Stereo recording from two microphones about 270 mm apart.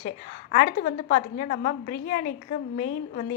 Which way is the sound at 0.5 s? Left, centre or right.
Left.